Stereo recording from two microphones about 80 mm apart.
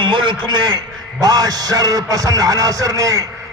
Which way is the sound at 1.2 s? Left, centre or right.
Right.